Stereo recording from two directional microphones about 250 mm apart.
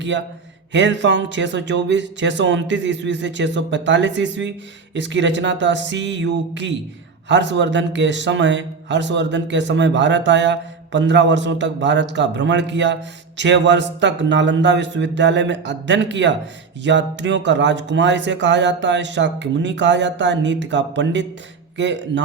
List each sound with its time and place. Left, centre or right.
0.1 s a man's voice: right